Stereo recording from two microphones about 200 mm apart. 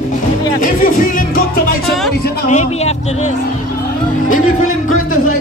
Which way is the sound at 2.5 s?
35° left (ahead or behind).